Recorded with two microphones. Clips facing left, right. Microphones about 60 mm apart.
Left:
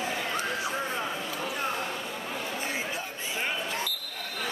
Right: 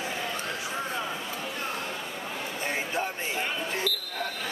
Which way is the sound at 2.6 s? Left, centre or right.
Right.